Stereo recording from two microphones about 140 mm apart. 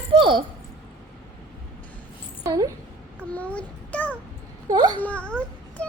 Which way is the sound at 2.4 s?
25° right (ahead or behind).